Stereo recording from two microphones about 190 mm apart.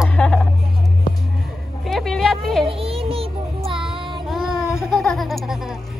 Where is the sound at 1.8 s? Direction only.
Centre (ahead or behind).